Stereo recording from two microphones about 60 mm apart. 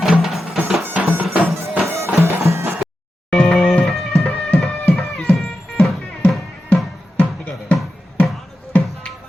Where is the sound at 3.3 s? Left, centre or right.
Centre.